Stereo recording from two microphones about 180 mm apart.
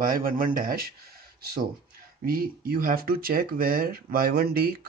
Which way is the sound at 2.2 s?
55° right (ahead or behind).